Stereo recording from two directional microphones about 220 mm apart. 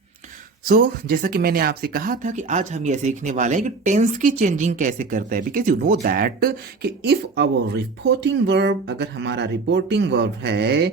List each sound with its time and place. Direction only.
0.7 s speech: 40° right (ahead or behind)